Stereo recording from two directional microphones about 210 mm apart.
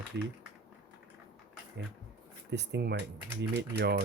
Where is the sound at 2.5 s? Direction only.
55° right (ahead or behind).